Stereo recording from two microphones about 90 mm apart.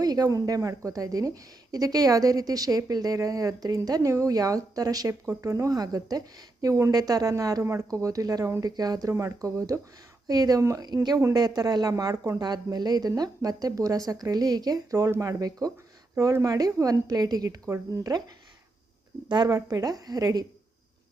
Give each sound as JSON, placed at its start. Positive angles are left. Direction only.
{"t": 0.0, "sound": "a woman's voice", "side_deg": -45}
{"t": 19.5, "sound": "a woman's voice", "side_deg": -40}